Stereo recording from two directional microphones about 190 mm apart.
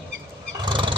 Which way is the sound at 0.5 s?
25° right (ahead or behind).